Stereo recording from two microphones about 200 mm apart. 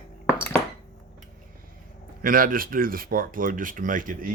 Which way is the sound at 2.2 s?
45° right (ahead or behind).